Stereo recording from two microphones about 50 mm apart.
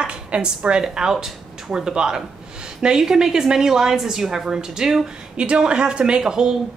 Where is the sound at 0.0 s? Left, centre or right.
Right.